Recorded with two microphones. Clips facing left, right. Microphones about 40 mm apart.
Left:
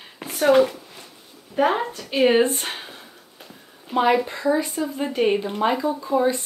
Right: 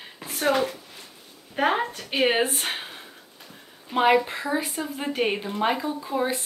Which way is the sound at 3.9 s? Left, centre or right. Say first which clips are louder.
Left 1 dB; centre.